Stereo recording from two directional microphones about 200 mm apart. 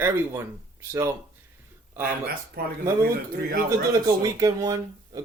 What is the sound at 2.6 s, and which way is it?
Speech, 50° right (ahead or behind).